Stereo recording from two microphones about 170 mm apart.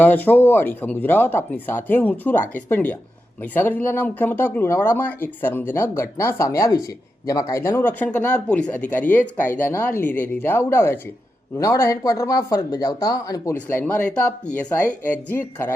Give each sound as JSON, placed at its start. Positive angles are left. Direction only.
{"t": 0.0, "sound": "speech", "side_deg": 10}